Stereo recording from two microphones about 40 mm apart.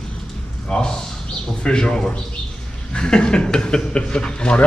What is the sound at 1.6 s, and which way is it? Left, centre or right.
Speech, centre.